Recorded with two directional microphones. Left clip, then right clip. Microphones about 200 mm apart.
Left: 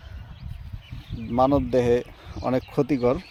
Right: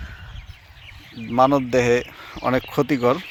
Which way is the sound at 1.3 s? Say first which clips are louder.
Right 4 dB; 20° right (ahead or behind).